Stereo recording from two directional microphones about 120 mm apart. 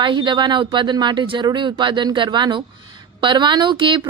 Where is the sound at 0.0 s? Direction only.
40° right (ahead or behind).